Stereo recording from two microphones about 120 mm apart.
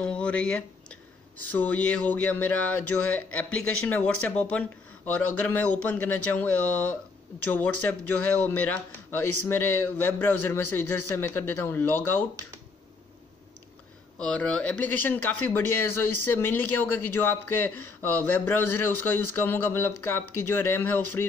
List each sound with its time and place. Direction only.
0.0 s speech: 10° left (ahead or behind)
14.1 s speech: 10° left (ahead or behind)